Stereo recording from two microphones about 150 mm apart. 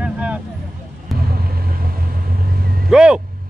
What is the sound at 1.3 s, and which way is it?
Vehicle, 85° right.